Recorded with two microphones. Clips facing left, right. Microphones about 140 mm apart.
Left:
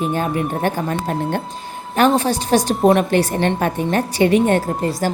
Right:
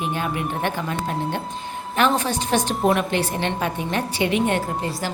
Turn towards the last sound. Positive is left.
turn(degrees=45)  # may be behind; listen again after turning